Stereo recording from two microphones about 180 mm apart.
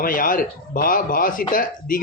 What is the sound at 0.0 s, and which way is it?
Speech, 50° left (ahead or behind).